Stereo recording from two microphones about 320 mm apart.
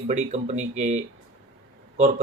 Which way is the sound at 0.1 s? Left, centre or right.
Right.